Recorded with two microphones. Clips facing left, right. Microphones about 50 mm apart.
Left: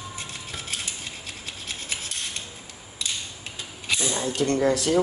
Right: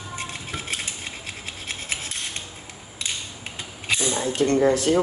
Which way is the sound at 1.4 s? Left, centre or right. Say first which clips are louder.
Right 3 dB; right.